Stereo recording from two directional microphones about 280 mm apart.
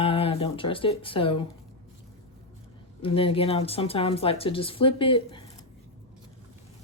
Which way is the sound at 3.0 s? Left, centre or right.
Centre.